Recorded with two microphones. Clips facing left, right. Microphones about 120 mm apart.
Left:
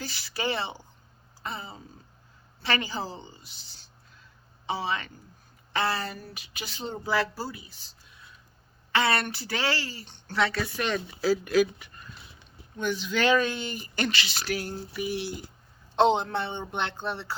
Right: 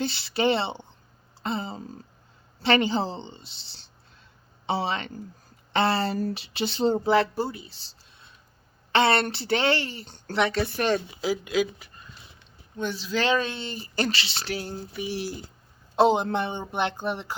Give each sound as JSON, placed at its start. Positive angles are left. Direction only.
{"t": 0.0, "sound": "speech", "side_deg": -25}
{"t": 1.4, "sound": "a sound", "side_deg": -30}
{"t": 2.6, "sound": "speech", "side_deg": -25}
{"t": 12.7, "sound": "speech", "side_deg": -30}
{"t": 16.0, "sound": "a man's voice", "side_deg": -5}